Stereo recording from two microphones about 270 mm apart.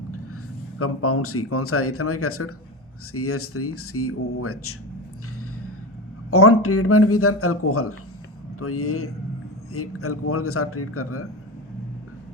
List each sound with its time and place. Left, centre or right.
0.8 s speech: left
6.3 s speech: left